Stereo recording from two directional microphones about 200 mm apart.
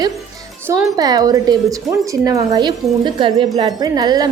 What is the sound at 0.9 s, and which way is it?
A woman's voice, 20° right (ahead or behind).